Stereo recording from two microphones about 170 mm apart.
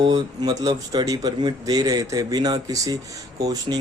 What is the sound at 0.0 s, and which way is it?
Speech, 25° right (ahead or behind).